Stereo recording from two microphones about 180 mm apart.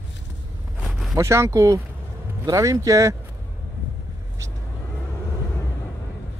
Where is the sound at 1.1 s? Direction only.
15° right (ahead or behind).